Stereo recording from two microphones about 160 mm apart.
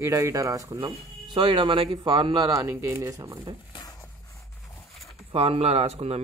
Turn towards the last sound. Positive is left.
turn(degrees=-40)  # may be behind; listen again after turning